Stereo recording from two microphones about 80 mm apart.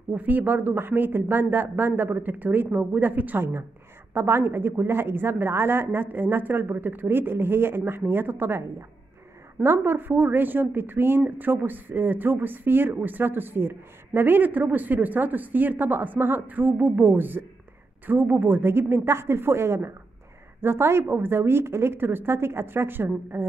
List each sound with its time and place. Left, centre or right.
0.1 s speech: right